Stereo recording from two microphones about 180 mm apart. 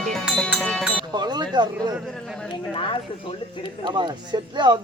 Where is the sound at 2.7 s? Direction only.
30° left (ahead or behind).